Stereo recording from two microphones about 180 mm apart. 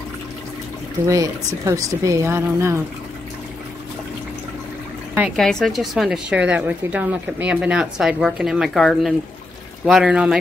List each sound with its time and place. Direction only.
1.0 s speech: 15° right (ahead or behind)
5.3 s speech: centre (ahead or behind)